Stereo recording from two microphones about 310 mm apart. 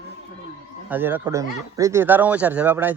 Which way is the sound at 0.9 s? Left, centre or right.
Centre.